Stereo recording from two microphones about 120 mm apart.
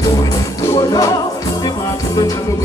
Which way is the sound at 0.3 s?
30° left (ahead or behind).